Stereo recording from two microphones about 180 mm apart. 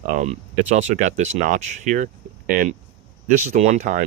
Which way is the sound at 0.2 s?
40° right (ahead or behind).